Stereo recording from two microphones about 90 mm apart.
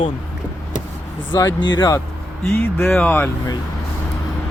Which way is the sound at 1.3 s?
35° left (ahead or behind).